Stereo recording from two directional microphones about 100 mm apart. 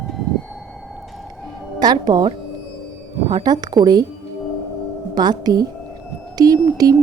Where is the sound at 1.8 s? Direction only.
45° right (ahead or behind).